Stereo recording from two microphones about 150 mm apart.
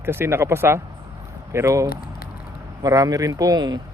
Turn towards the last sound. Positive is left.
turn(degrees=-25)  # may be behind; listen again after turning